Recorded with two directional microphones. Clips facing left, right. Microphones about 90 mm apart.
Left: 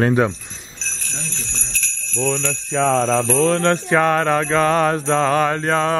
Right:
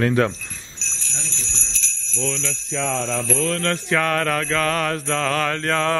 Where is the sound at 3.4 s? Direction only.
30° left (ahead or behind).